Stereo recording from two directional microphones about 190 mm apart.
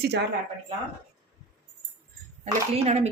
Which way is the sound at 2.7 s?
35° right (ahead or behind).